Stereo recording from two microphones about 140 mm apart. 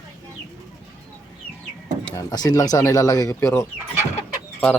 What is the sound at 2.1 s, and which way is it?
Speech, 25° left (ahead or behind).